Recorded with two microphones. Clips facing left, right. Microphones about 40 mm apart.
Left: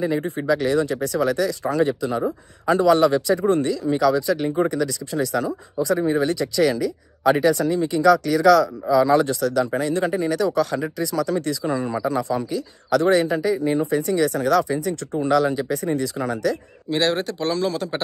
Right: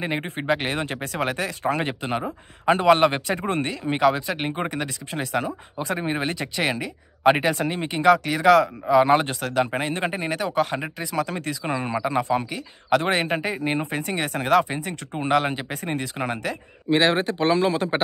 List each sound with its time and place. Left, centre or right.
0.0 s speech: right